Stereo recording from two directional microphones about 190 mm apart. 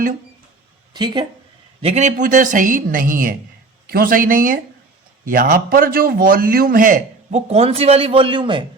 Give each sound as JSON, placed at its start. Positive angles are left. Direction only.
{"t": 0.9, "sound": "speech", "side_deg": -20}
{"t": 1.8, "sound": "a man's voice", "side_deg": -35}